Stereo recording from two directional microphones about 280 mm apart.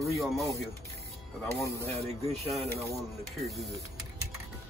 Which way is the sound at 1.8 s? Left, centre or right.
Right.